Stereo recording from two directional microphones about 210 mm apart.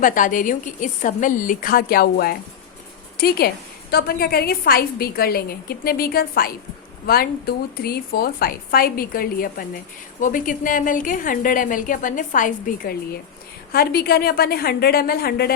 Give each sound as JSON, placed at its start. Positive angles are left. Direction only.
{"t": 0.0, "sound": "a woman's voice", "side_deg": 40}